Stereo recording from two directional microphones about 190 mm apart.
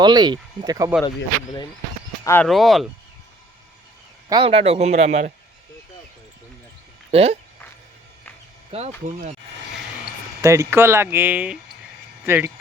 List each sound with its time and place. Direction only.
0.0 s speech: 20° right (ahead or behind)
2.2 s speech: 10° left (ahead or behind)
2.5 s speech: centre (ahead or behind)
4.3 s speech: 25° right (ahead or behind)
7.1 s speech: 30° right (ahead or behind)
8.7 s speech: 30° right (ahead or behind)
10.4 s speech: 15° right (ahead or behind)